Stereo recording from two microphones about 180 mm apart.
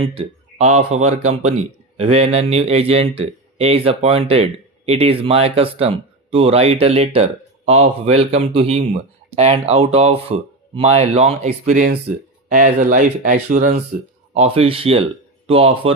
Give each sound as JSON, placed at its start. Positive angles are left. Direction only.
{"t": 0.0, "sound": "speech", "side_deg": -30}
{"t": 14.3, "sound": "speech", "side_deg": -35}